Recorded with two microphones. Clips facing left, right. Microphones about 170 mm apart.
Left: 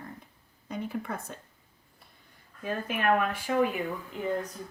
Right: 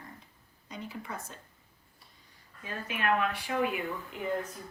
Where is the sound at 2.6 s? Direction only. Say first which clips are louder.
Left 5 dB; 50° left (ahead or behind).